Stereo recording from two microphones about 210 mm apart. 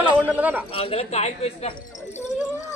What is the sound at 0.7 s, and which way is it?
Speech, 25° left (ahead or behind).